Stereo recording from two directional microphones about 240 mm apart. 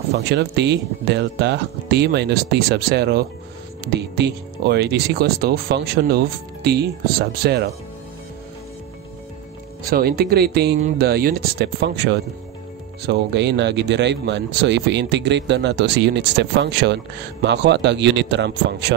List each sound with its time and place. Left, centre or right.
0.3 s speech: right
9.8 s speech: right